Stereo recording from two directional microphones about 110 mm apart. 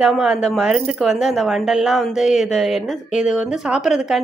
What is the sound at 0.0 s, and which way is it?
A woman's voice, 5° right (ahead or behind).